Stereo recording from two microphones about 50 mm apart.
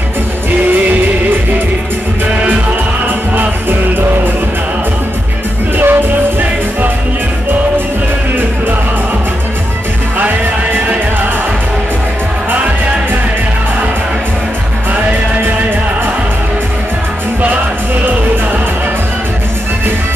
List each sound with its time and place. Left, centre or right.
0.7 s music: right
5.8 s music: right
10.1 s music: right